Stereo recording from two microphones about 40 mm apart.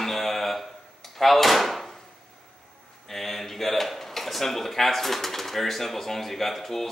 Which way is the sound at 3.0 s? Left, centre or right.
Centre.